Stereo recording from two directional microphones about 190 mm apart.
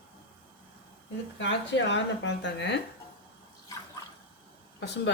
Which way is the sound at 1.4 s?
70° left (ahead or behind).